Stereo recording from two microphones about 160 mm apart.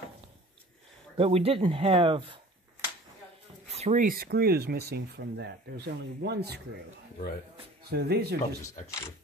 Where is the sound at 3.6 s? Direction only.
45° right (ahead or behind); by 6.8 s 90° right.